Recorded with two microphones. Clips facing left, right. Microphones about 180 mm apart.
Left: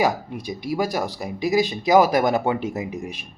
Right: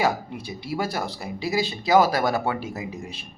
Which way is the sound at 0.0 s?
15° left (ahead or behind).